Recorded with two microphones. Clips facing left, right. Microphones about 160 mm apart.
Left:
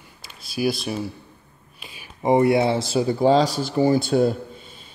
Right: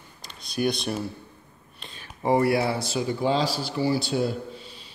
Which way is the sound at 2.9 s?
35° left (ahead or behind).